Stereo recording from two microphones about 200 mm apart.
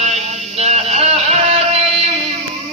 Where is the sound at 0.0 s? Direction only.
35° right (ahead or behind).